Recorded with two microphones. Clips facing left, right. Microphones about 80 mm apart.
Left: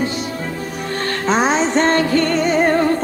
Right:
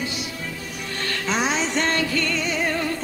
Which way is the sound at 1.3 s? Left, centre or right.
Left.